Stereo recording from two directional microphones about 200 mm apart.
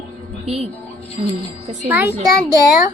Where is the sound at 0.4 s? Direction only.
30° right (ahead or behind).